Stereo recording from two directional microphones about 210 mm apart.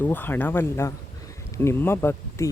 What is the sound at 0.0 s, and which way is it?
Speech, 10° left (ahead or behind).